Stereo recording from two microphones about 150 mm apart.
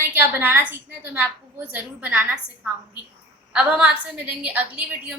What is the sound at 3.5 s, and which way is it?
A woman's voice, 5° right (ahead or behind).